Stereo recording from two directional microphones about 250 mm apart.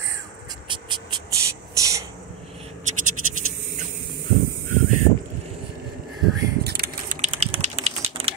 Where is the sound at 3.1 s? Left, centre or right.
Right.